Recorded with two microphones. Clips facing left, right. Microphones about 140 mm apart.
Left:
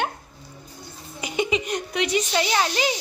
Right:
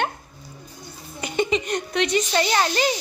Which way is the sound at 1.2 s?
5° left (ahead or behind).